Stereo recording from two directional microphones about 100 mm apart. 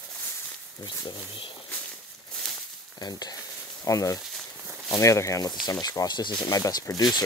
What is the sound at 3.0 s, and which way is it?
Speech, 40° left (ahead or behind).